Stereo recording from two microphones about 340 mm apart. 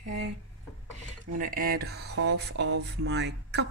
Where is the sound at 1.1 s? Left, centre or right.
Right.